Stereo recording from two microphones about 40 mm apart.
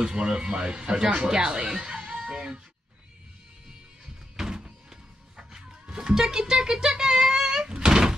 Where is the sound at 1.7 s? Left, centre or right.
Centre.